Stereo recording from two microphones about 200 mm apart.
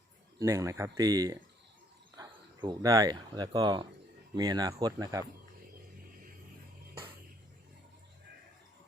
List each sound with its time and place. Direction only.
0.3 s speech: 15° right (ahead or behind)